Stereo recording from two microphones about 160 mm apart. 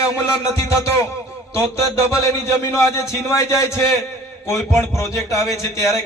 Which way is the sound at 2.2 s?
15° left (ahead or behind).